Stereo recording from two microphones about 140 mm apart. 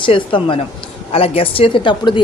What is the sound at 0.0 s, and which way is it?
Speech, 40° left (ahead or behind).